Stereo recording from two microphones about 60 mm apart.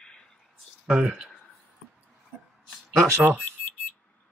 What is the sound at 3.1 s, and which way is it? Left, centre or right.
Speech, right.